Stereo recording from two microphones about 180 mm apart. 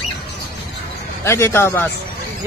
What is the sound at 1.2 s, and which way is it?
Speech, 15° left (ahead or behind).